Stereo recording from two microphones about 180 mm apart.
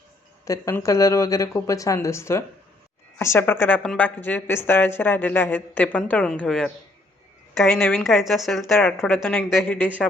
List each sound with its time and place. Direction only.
0.4 s a woman's voice: 15° left (ahead or behind)